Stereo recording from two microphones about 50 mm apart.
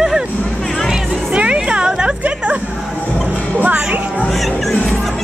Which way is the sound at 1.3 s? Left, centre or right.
Right.